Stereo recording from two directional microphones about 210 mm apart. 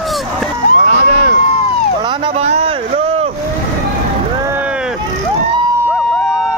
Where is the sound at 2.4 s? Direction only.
30° right (ahead or behind).